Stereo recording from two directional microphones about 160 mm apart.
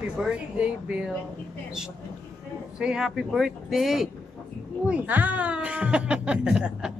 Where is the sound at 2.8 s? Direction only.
5° right (ahead or behind).